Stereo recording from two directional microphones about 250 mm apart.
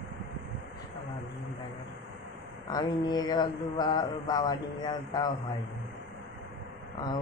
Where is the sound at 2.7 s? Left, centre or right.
Centre.